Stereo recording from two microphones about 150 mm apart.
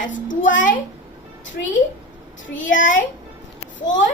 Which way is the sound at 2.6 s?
60° left (ahead or behind).